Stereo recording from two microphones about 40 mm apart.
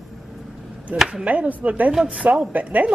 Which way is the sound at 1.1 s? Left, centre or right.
Right.